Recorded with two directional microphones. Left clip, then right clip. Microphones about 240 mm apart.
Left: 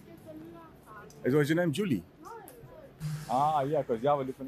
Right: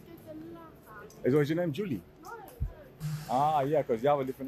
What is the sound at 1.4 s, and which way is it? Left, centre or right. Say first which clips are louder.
Speech: left 2 dB; centre.